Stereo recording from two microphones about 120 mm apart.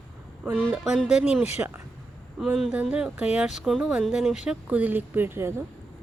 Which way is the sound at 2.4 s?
5° right (ahead or behind).